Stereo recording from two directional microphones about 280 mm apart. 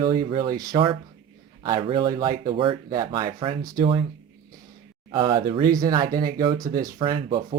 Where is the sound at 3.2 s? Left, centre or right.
Right.